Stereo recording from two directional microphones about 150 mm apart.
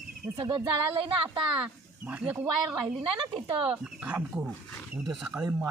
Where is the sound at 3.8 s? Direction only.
10° right (ahead or behind).